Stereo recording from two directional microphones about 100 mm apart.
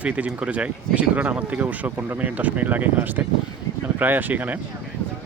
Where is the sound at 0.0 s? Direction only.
15° right (ahead or behind).